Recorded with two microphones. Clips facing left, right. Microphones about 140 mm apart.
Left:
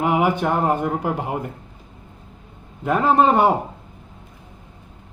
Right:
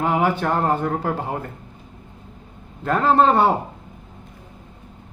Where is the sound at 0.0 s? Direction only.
15° left (ahead or behind).